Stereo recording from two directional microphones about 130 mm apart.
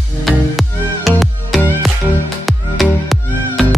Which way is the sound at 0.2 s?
Centre (ahead or behind).